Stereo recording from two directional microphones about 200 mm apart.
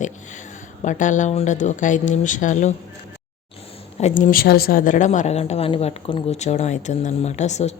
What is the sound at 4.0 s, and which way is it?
Speech, 35° left (ahead or behind).